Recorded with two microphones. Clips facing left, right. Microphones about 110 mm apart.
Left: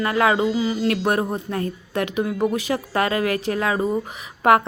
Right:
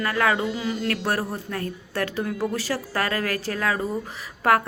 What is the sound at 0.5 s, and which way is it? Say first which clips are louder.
Mantra: left 6 dB; 5° left (ahead or behind).